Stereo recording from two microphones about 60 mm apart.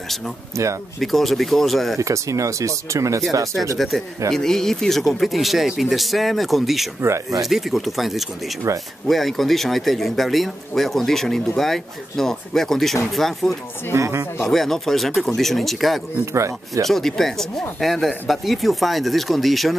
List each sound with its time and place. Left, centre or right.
0.5 s speech: right
0.9 s speech: centre
2.0 s speech: right
3.7 s speech: centre
8.7 s speech: right
9.0 s speech: centre
13.9 s speech: right
14.4 s speech: centre
16.3 s speech: right
16.8 s speech: centre